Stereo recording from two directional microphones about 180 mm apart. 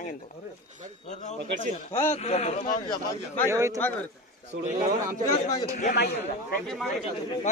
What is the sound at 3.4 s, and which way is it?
Speech, 15° right (ahead or behind).